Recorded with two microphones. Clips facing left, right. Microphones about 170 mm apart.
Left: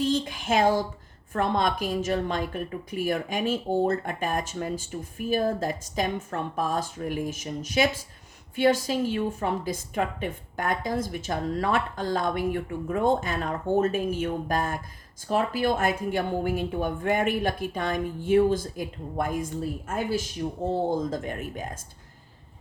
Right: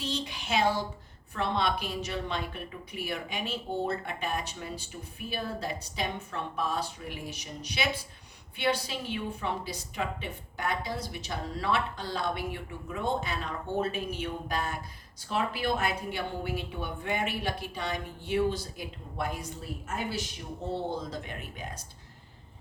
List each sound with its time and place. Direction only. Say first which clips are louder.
0.0 s a woman's voice: left 9 dB; 50° left (ahead or behind)
20.7 s a woman's voice: left 7 dB; 45° left (ahead or behind)